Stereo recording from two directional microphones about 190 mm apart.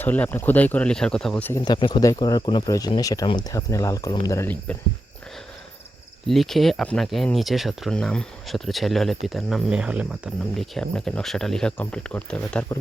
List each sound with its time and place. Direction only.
0.0 s speech: 10° left (ahead or behind)
1.6 s speech: 25° left (ahead or behind)
6.2 s speech: centre (ahead or behind)